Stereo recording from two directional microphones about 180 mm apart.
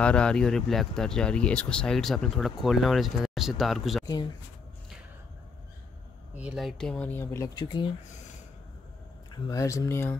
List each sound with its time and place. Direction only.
0.0 s speech: 5° left (ahead or behind)
6.3 s speech: 5° right (ahead or behind); by 7.9 s 25° left (ahead or behind)
9.3 s speech: 20° left (ahead or behind)